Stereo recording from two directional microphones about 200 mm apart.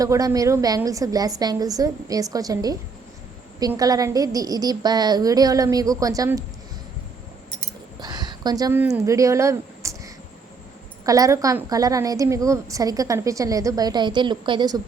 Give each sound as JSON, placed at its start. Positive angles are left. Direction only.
{"t": 0.0, "sound": "a woman's voice", "side_deg": -15}
{"t": 7.9, "sound": "a sound", "side_deg": -20}
{"t": 11.0, "sound": "a woman's voice", "side_deg": -15}